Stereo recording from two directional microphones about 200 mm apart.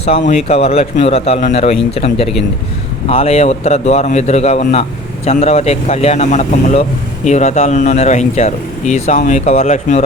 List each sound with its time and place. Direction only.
0.3 s a man's voice: 30° left (ahead or behind)